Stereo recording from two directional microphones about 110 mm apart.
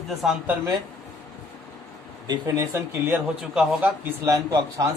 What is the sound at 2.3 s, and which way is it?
Speech, 30° right (ahead or behind).